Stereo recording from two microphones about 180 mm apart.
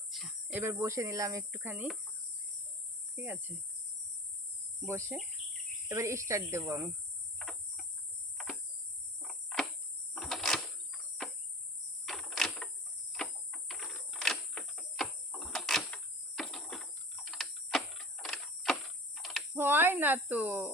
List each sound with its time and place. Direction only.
0.1 s speech: 5° right (ahead or behind)
3.2 s speech: 10° right (ahead or behind)
4.9 s speech: 15° right (ahead or behind)
7.3 s cricket: centre (ahead or behind)
10.2 s a sound: centre (ahead or behind)
11.2 s cricket: centre (ahead or behind)
12.0 s a sound: centre (ahead or behind)
19.5 s cricket: 10° right (ahead or behind)